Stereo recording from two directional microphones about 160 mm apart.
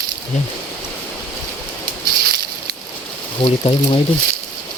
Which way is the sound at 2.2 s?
75° right (ahead or behind).